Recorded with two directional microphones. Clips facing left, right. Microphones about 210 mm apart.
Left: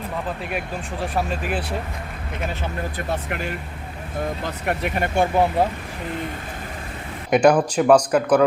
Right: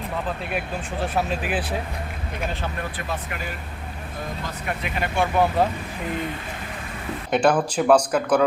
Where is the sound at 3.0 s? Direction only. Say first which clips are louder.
Left 5 dB; 40° left (ahead or behind).